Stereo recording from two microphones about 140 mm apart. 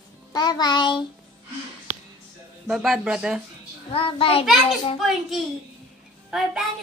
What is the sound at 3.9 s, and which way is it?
Music, 40° left (ahead or behind).